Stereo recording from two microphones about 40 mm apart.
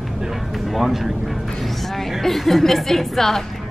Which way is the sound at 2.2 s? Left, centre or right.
Centre.